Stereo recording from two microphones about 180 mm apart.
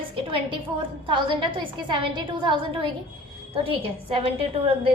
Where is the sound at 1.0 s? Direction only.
25° right (ahead or behind).